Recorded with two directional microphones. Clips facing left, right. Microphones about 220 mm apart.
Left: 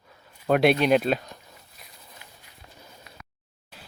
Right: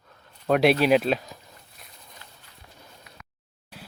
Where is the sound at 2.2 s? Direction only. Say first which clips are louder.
Even; 10° left (ahead or behind).